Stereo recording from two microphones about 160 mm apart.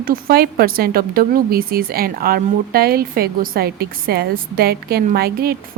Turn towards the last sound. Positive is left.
turn(degrees=-75)  # may be behind; listen again after turning